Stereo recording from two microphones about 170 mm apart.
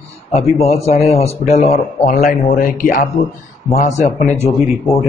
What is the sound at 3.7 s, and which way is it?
Speech, 45° left (ahead or behind).